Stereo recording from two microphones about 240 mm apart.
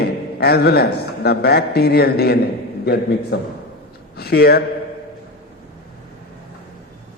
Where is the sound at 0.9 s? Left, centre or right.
Left.